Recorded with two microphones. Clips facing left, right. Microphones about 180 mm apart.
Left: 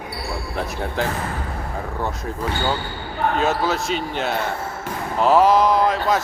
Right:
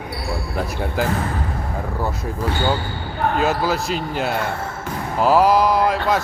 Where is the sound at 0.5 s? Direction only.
5° right (ahead or behind).